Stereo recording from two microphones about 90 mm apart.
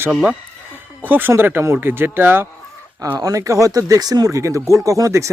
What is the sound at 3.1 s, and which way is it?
Speech, 40° right (ahead or behind).